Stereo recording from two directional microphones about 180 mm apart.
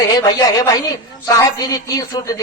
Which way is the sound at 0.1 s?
20° left (ahead or behind).